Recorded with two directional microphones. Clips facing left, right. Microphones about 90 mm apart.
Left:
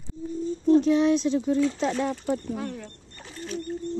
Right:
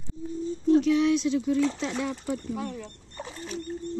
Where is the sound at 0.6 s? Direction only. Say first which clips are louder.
Left 2 dB; 35° left (ahead or behind).